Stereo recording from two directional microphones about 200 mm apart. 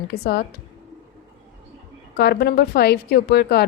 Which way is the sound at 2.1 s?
50° left (ahead or behind).